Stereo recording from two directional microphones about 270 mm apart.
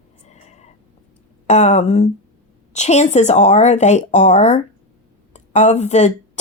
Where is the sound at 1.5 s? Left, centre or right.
Left.